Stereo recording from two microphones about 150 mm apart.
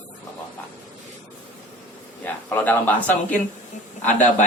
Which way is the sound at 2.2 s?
10° left (ahead or behind).